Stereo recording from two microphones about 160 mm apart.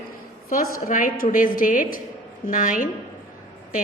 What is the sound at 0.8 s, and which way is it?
A woman's voice, 60° left (ahead or behind).